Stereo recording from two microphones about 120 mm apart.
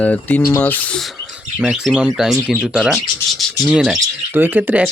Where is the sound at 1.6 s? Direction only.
5° right (ahead or behind).